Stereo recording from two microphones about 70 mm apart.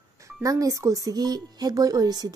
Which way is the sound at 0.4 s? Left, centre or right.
Right.